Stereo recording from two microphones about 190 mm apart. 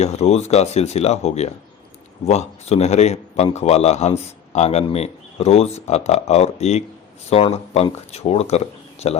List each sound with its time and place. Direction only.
0.0 s a man's voice: 35° left (ahead or behind)